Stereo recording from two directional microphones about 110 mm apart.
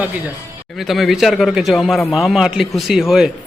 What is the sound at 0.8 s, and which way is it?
A man's voice, centre (ahead or behind).